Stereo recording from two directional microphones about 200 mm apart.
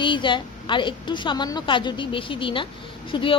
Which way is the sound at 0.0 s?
25° left (ahead or behind).